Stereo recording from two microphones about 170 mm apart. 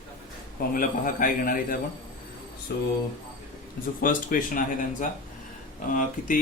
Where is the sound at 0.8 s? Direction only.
55° left (ahead or behind).